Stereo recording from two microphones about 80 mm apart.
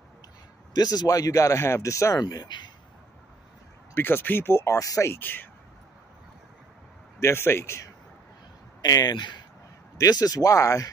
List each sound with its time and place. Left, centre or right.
0.7 s speech: left
2.2 s speech: left
3.9 s speech: left
7.2 s speech: left
8.8 s speech: left
9.9 s speech: left